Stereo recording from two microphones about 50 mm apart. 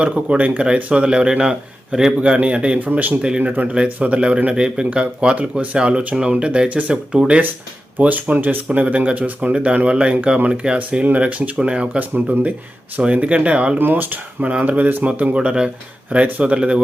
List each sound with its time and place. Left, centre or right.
0.0 s speech: right
2.2 s speech: right
2.7 s speech: right
3.2 s speech: right
7.9 s speech: right
10.8 s speech: right
11.9 s speech: right
13.7 s speech: right
15.4 s speech: centre